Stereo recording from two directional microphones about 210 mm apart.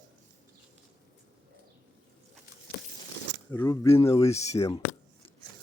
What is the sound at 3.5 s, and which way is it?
Speech, 15° left (ahead or behind).